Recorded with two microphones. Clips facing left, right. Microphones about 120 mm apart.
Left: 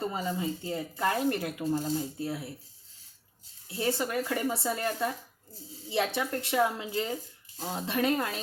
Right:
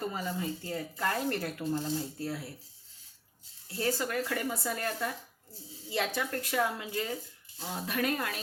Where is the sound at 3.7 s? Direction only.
20° left (ahead or behind).